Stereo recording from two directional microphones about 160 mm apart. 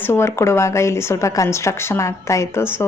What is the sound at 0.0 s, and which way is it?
A woman's voice, 15° left (ahead or behind).